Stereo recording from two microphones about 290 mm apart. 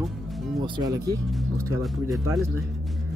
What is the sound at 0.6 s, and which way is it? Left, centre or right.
Speech, centre.